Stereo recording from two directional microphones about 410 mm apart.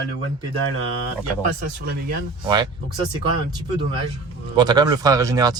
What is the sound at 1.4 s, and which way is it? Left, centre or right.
Speech, centre.